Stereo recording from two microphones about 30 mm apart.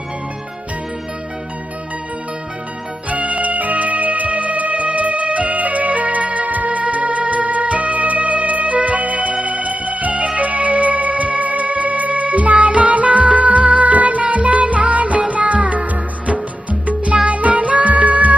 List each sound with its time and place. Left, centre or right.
3.1 s music: right
16.8 s music: right